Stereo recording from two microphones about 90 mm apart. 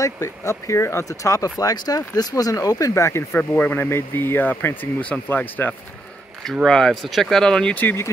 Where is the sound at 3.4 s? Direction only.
20° left (ahead or behind).